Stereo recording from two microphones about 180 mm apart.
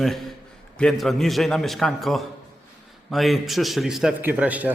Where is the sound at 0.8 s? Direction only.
Centre (ahead or behind).